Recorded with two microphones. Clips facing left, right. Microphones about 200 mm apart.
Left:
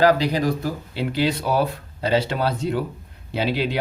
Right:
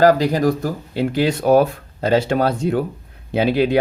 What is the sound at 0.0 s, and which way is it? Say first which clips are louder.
Speech: right 4 dB; 45° right (ahead or behind).